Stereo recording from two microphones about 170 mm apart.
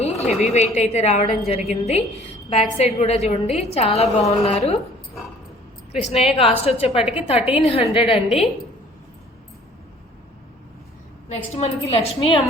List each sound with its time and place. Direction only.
0.0 s a woman's voice: 40° left (ahead or behind)
5.9 s a woman's voice: 40° left (ahead or behind)
7.0 s a woman's voice: 5° right (ahead or behind)
7.7 s a woman's voice: 30° left (ahead or behind)
11.5 s a woman's voice: 40° left (ahead or behind)